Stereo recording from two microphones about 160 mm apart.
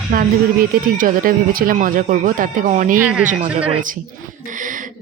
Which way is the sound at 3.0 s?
10° right (ahead or behind).